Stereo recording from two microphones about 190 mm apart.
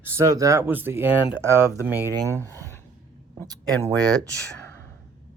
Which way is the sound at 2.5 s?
15° left (ahead or behind).